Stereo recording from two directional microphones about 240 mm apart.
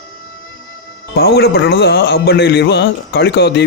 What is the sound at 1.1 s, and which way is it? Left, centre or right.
Speech, left.